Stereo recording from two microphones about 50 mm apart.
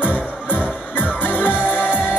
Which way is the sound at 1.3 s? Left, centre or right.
Left.